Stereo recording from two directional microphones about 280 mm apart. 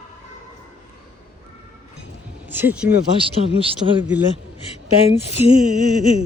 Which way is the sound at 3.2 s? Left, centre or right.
Centre.